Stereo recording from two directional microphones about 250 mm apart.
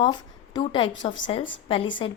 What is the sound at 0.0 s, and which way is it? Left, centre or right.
A woman's voice, centre.